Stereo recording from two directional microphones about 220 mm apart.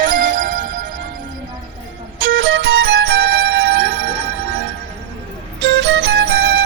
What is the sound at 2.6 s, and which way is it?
Music, 45° right (ahead or behind).